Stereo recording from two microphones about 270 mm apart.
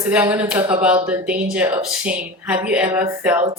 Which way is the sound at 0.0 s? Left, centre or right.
Centre.